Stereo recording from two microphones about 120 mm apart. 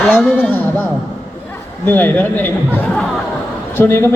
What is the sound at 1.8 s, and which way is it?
Speech, 15° left (ahead or behind).